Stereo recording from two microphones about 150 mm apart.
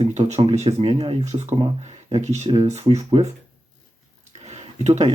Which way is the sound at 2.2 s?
50° right (ahead or behind).